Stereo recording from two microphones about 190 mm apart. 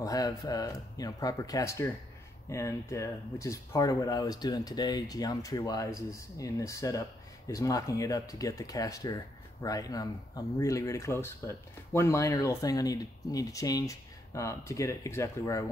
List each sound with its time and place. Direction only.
0.0 s speech: 20° left (ahead or behind)